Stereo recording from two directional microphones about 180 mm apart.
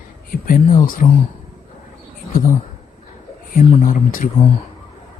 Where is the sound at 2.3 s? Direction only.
45° left (ahead or behind).